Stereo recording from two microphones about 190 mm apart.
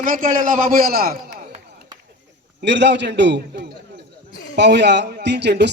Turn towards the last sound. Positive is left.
turn(degrees=-60)  # may be behind; listen again after turning